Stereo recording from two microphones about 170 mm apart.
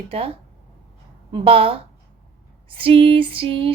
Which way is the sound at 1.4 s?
35° right (ahead or behind).